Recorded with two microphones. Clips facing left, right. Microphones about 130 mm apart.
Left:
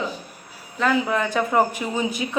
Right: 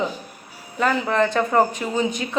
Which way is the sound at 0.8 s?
Centre (ahead or behind).